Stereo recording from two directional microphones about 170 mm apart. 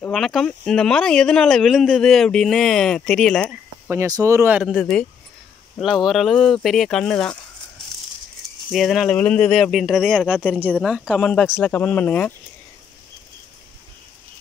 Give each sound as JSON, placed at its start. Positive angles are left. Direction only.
{"t": 0.1, "sound": "speech", "side_deg": 0}
{"t": 3.9, "sound": "speech", "side_deg": -20}
{"t": 4.6, "sound": "speech", "side_deg": 0}
{"t": 6.0, "sound": "speech", "side_deg": 0}
{"t": 8.7, "sound": "speech", "side_deg": 0}